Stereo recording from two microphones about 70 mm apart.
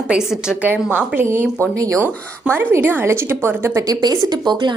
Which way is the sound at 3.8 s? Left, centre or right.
Right.